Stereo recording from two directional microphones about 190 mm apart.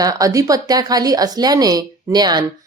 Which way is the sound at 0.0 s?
20° right (ahead or behind).